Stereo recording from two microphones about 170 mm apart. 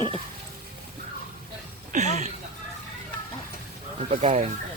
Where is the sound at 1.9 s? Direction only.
45° right (ahead or behind).